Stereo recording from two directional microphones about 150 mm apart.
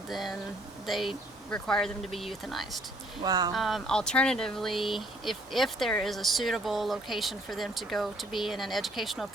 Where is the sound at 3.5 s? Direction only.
Centre (ahead or behind).